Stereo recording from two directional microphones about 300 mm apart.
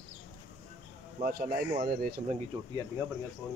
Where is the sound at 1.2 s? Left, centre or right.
Right.